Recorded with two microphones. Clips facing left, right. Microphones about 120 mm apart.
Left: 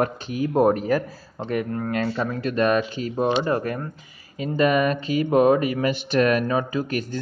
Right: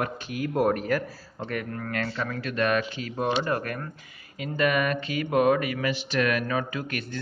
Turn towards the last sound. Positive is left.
turn(degrees=35)  # may be behind; listen again after turning